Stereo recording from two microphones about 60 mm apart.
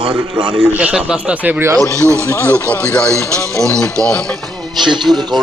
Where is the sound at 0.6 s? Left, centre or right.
Right.